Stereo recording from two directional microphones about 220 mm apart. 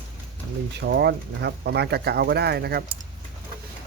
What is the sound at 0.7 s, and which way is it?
Speech, 50° right (ahead or behind).